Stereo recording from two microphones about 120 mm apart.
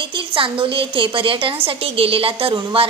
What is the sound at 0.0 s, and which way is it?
A woman's voice, 45° right (ahead or behind).